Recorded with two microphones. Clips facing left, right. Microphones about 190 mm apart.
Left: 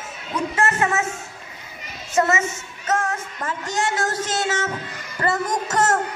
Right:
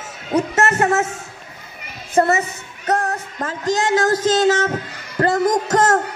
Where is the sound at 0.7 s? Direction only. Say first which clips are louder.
Right 5 dB; 45° right (ahead or behind).